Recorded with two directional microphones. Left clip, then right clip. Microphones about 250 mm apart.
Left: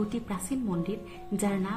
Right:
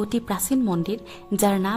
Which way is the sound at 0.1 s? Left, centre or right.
Right.